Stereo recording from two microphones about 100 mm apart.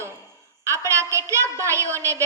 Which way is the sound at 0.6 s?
30° right (ahead or behind).